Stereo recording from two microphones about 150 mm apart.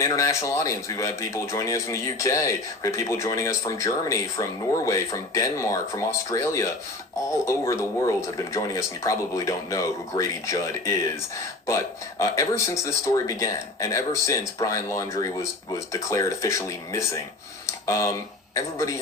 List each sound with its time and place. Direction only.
0.0 s speech: 20° left (ahead or behind)